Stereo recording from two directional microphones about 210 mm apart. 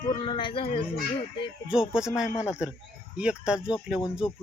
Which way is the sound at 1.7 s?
5° right (ahead or behind).